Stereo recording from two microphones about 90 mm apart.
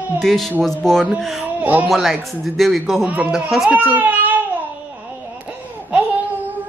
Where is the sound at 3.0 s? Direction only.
15° right (ahead or behind).